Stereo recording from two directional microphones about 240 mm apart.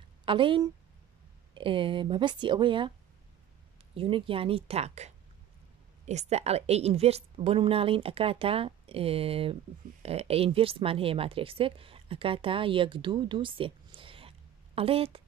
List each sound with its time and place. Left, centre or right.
0.2 s a woman's voice: right
3.9 s a woman's voice: right